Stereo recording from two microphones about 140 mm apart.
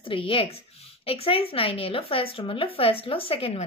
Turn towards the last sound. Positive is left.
turn(degrees=45)  # may be behind; listen again after turning